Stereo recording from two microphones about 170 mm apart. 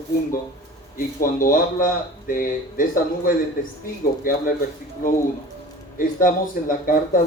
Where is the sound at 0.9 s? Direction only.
55° left (ahead or behind).